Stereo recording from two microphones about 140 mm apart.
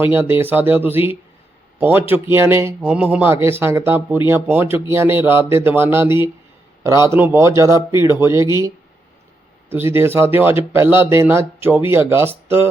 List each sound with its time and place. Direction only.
0.0 s a man's voice: 15° right (ahead or behind)
9.6 s speech: 15° right (ahead or behind)